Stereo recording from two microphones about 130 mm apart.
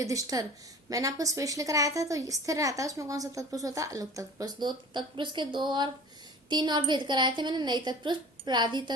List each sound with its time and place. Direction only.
0.0 s a woman's voice: 25° right (ahead or behind)